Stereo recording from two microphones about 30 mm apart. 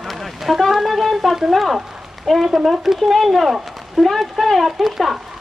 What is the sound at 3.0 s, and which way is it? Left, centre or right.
Speech, centre.